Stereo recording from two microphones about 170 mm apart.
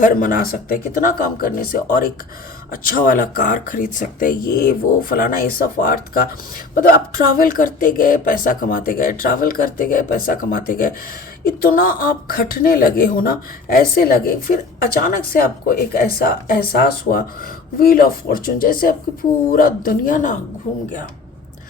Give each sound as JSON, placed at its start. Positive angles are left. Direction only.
{"t": 0.0, "sound": "speech", "side_deg": 50}